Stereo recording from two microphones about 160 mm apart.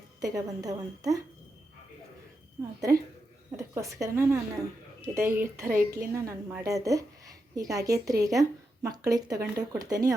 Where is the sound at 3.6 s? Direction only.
20° right (ahead or behind).